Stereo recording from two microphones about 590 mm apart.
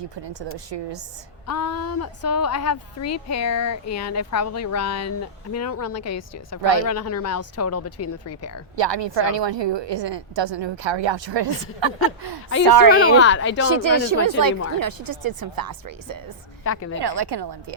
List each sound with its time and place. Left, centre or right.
1.5 s a woman's voice: left
8.7 s a woman's voice: right
13.1 s a woman's voice: centre
13.7 s speech: right
16.6 s a woman's voice: left
17.0 s speech: right